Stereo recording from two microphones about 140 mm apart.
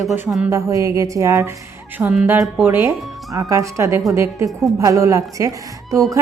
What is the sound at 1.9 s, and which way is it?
A woman's voice, 10° right (ahead or behind).